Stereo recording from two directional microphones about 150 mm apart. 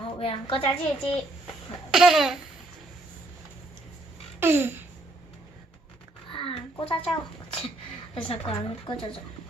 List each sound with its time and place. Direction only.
0.0 s a woman's voice: 40° left (ahead or behind)
1.9 s laughter: 5° right (ahead or behind)
4.4 s babbling: 15° right (ahead or behind)
6.3 s a sound: 35° left (ahead or behind)
8.1 s a woman's voice: 40° left (ahead or behind)